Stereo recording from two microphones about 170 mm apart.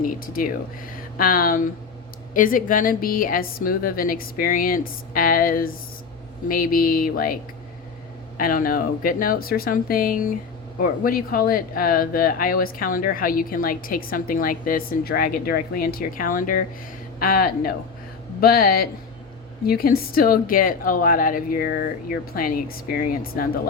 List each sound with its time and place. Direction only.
0.0 s speech: 55° left (ahead or behind)
8.4 s speech: 55° left (ahead or behind)